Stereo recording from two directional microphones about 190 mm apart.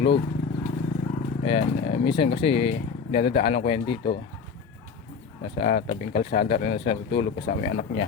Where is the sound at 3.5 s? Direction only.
30° left (ahead or behind).